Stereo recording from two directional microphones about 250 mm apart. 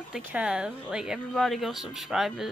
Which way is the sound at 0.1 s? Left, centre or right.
Centre.